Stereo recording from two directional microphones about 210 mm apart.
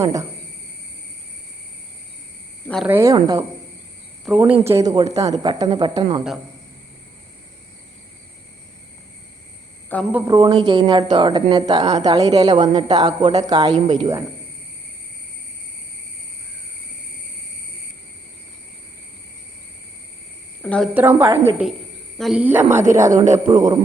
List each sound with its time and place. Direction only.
0.0 s a woman's voice: 15° right (ahead or behind)
2.8 s a woman's voice: 10° right (ahead or behind)
4.3 s a woman's voice: 5° right (ahead or behind)
10.1 s a woman's voice: 10° right (ahead or behind)
20.6 s speech: 5° left (ahead or behind)
20.9 s a woman's voice: 10° right (ahead or behind)